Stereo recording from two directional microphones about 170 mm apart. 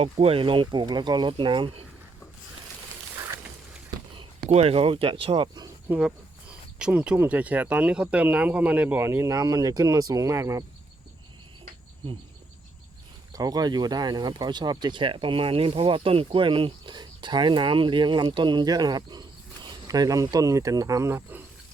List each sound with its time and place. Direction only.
0.0 s speech: 35° right (ahead or behind)
4.4 s speech: 40° right (ahead or behind)
5.9 s speech: 5° right (ahead or behind)
13.3 s speech: 20° right (ahead or behind)